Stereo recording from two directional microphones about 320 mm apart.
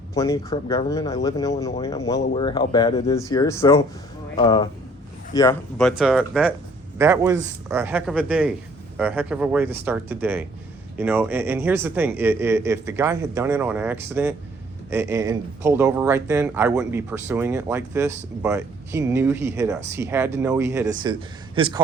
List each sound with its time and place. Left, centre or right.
0.1 s speech: centre
5.7 s speech: centre